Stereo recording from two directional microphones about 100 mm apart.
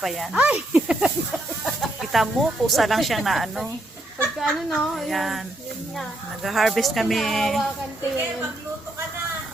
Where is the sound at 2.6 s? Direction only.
Centre (ahead or behind).